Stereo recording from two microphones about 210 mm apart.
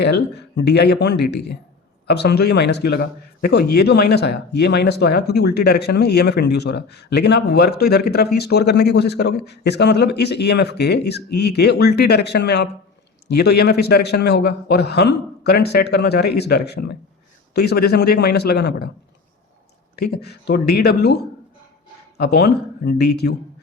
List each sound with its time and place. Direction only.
0.0 s a man's voice: 55° left (ahead or behind)
20.0 s a man's voice: 50° left (ahead or behind)